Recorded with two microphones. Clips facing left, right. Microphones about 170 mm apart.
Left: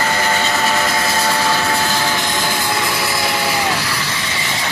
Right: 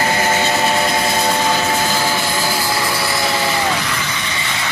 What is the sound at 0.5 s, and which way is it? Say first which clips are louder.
Vehicle: right 1 dB; 20° right (ahead or behind).